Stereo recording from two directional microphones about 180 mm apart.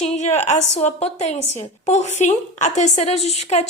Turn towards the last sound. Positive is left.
turn(degrees=35)  # may be behind; listen again after turning